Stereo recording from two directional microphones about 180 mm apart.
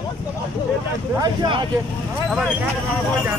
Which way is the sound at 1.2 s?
25° right (ahead or behind).